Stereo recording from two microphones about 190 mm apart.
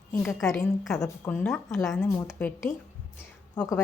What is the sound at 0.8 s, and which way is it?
Speech, centre (ahead or behind).